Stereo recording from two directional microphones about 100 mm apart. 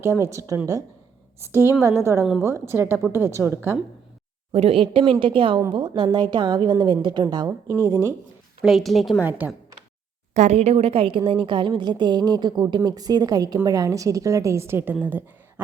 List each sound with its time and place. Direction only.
0.0 s a woman's voice: 30° right (ahead or behind)
4.5 s a woman's voice: 85° right
5.2 s a woman's voice: 60° right (ahead or behind); by 7.5 s 45° right (ahead or behind)
7.7 s a woman's voice: 30° right (ahead or behind)
8.6 s a woman's voice: centre (ahead or behind)
10.5 s a woman's voice: 90° right; by 15.6 s 20° right (ahead or behind)